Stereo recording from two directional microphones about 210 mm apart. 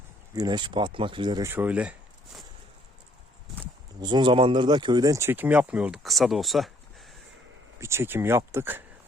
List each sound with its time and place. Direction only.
0.3 s speech: 20° right (ahead or behind)
4.0 s speech: 20° right (ahead or behind); by 6.7 s centre (ahead or behind)
7.8 s speech: 10° right (ahead or behind)